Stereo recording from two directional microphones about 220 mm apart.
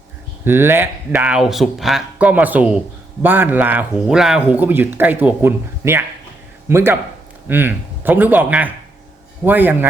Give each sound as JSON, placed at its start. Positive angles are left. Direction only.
{"t": 0.4, "sound": "speech", "side_deg": -10}